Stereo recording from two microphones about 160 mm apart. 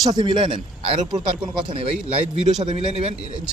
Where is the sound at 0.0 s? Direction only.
25° right (ahead or behind).